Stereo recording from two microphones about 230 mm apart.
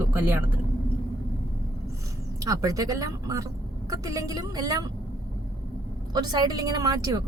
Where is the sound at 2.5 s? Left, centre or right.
Centre.